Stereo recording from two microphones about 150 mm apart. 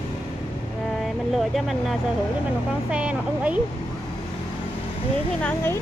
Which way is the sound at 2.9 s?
10° right (ahead or behind).